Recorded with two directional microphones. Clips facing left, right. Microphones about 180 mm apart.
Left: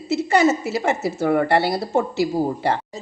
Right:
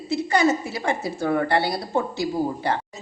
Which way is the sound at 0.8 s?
25° left (ahead or behind).